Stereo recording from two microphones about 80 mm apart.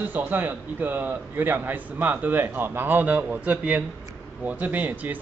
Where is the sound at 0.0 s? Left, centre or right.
Right.